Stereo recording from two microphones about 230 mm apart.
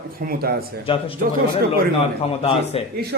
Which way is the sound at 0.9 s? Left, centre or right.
Left.